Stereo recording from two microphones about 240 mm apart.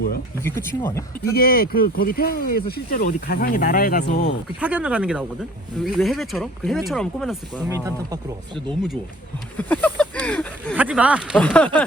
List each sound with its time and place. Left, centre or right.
0.4 s speech: centre
1.2 s speech: left
4.6 s speech: centre
7.7 s speech: centre
9.6 s a sound: centre
10.8 s speech: centre